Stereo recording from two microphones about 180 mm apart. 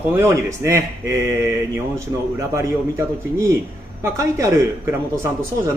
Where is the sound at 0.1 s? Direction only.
15° right (ahead or behind).